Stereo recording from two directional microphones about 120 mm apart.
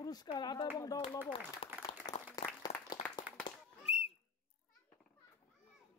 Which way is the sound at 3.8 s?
60° left (ahead or behind).